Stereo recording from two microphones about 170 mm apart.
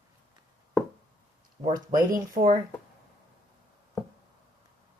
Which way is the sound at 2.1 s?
55° right (ahead or behind).